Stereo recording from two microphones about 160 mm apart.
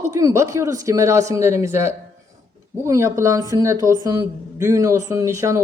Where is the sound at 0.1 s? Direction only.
20° right (ahead or behind).